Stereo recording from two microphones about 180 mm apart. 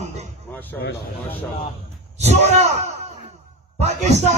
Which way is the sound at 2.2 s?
35° right (ahead or behind).